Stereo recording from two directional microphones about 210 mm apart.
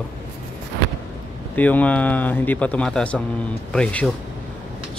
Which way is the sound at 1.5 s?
5° left (ahead or behind).